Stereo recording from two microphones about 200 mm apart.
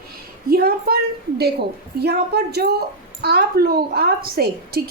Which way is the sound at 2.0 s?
55° right (ahead or behind).